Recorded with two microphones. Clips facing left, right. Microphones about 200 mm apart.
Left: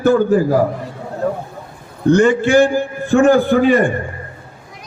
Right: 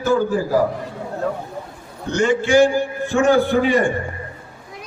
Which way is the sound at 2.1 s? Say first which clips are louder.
Left 2 dB; 55° left (ahead or behind).